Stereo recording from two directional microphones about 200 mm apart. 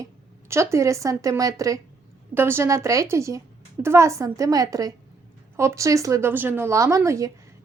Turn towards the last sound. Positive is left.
turn(degrees=-15)  # may be behind; listen again after turning